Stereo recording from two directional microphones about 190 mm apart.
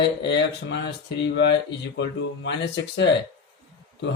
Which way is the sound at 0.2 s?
65° left (ahead or behind).